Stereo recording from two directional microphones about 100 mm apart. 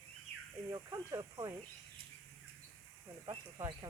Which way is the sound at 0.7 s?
35° right (ahead or behind).